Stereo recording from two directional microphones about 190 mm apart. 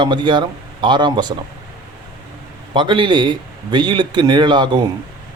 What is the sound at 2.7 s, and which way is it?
Speech, 25° right (ahead or behind).